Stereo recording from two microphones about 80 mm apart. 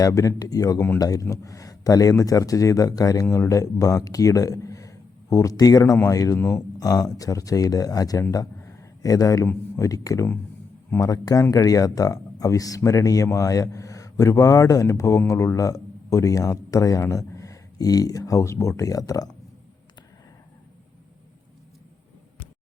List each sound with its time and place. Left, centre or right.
0.0 s a man's voice: left